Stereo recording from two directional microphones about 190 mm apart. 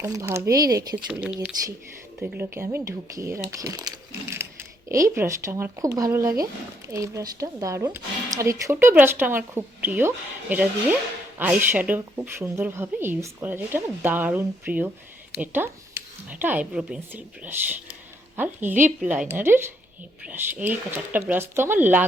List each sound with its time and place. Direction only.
0.0 s speech: 15° right (ahead or behind)
1.0 s speech: 5° right (ahead or behind)